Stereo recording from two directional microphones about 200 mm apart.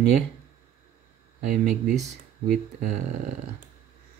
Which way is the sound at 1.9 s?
Centre (ahead or behind).